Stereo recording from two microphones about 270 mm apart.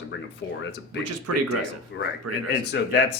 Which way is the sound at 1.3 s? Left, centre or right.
Right.